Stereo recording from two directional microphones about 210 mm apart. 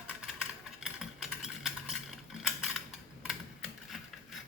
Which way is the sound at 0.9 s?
5° right (ahead or behind).